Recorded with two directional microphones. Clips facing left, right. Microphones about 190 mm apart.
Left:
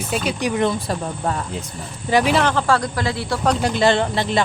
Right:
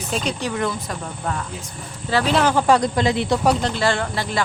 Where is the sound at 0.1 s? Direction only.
10° left (ahead or behind); by 1.4 s 30° left (ahead or behind).